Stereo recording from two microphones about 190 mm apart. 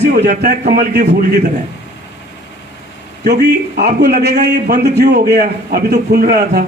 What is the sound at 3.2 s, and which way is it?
A man's voice, 60° right (ahead or behind).